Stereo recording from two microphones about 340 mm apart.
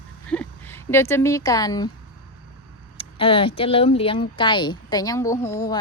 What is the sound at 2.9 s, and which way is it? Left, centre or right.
Speech, centre.